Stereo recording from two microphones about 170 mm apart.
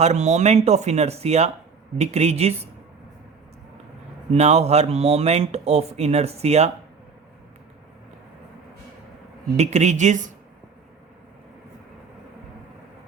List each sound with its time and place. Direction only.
0.0 s speech: 40° right (ahead or behind)
4.3 s speech: 40° right (ahead or behind)
9.6 s speech: 40° right (ahead or behind)